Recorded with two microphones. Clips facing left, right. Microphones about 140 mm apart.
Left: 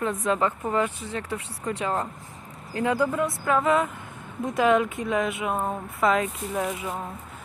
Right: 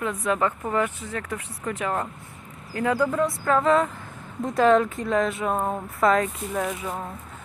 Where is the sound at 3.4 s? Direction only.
10° left (ahead or behind).